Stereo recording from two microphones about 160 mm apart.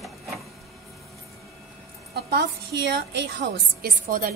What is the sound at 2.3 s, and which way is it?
A woman's voice, 90° right.